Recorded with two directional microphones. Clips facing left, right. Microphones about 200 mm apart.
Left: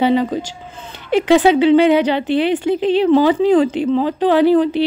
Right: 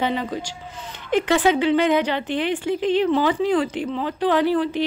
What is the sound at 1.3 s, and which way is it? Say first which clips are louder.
Speech: left 8 dB; 20° left (ahead or behind).